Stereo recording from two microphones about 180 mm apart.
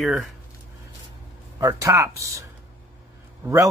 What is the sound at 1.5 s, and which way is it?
Speech, 20° right (ahead or behind).